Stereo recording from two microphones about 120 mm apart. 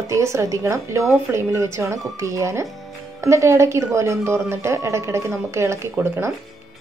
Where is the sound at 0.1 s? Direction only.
25° right (ahead or behind).